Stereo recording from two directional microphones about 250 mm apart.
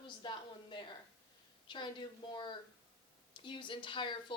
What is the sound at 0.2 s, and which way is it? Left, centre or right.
A woman's voice, centre.